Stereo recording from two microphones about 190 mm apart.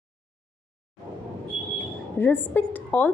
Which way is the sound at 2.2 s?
10° left (ahead or behind).